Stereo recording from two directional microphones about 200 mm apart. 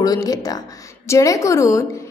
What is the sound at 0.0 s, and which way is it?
A woman's voice, 20° left (ahead or behind).